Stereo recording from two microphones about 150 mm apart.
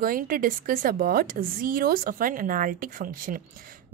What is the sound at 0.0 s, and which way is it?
A woman's voice, 70° right (ahead or behind).